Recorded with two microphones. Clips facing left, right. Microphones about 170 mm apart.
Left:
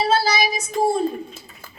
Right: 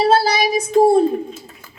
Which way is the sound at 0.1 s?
60° right (ahead or behind).